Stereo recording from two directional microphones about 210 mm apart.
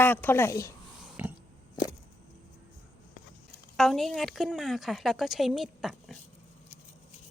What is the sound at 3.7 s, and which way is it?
A woman's voice, centre (ahead or behind).